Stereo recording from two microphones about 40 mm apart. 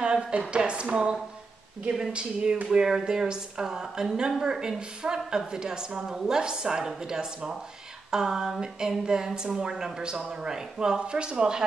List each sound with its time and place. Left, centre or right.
0.0 s a woman's voice: right